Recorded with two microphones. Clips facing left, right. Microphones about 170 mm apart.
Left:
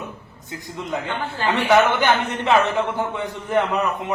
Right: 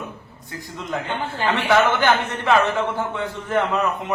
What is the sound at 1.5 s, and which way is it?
A man's voice, 15° left (ahead or behind).